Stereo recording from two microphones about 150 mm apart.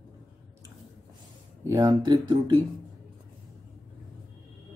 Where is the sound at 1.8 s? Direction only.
30° right (ahead or behind).